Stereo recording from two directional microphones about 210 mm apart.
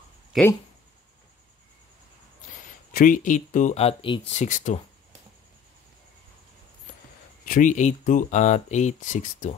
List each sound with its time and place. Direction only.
2.9 s speech: 40° left (ahead or behind)
4.4 s speech: 35° left (ahead or behind)
7.4 s speech: 40° left (ahead or behind)